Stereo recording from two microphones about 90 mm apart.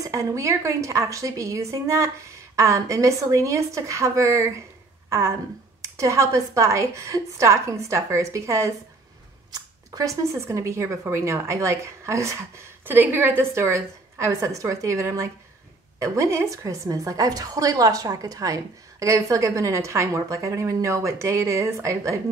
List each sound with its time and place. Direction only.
0.0 s a woman's voice: 35° right (ahead or behind)
12.8 s a woman's voice: 25° right (ahead or behind)